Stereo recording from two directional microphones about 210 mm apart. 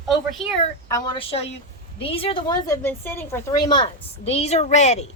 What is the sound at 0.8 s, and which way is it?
A woman's voice, 15° left (ahead or behind).